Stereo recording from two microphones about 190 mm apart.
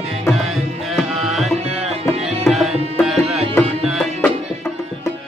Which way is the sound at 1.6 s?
30° right (ahead or behind).